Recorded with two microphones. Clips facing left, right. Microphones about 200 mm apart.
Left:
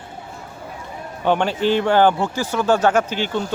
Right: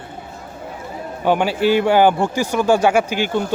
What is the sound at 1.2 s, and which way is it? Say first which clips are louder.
Speech: right 2 dB; 10° right (ahead or behind).